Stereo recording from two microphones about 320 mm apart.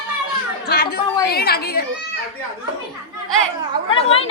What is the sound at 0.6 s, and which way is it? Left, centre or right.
Speech, left.